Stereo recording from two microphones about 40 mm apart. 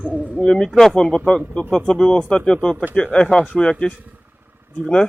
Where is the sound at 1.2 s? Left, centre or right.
Left.